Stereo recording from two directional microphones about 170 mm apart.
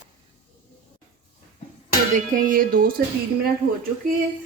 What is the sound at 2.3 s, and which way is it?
Speech, 55° right (ahead or behind).